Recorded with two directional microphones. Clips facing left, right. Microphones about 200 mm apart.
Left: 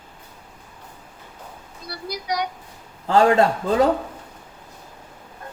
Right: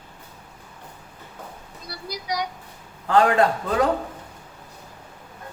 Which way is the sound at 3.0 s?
25° left (ahead or behind).